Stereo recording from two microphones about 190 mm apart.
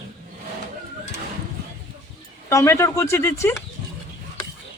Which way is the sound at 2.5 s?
15° left (ahead or behind).